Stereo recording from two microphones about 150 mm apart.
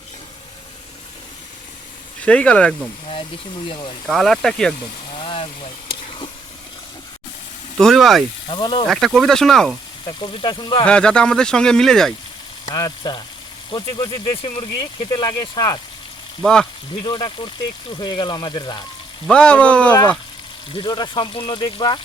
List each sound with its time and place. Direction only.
2.2 s speech: 10° left (ahead or behind)
3.1 s speech: 35° left (ahead or behind)
4.1 s speech: centre (ahead or behind)
5.1 s vehicle: 35° left (ahead or behind)
7.8 s speech: centre (ahead or behind)
8.4 s speech: 30° left (ahead or behind)
8.9 s speech: centre (ahead or behind)
10.1 s speech: 30° left (ahead or behind)
10.8 s speech: 5° left (ahead or behind)
12.6 s speech: 25° left (ahead or behind)
16.4 s speech: 5° left (ahead or behind)
17.0 s speech: 30° left (ahead or behind)
19.3 s speech: 5° left (ahead or behind)
20.7 s speech: 30° left (ahead or behind)